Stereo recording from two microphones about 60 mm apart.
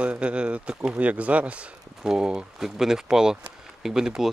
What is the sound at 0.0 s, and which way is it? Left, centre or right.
Speech, right.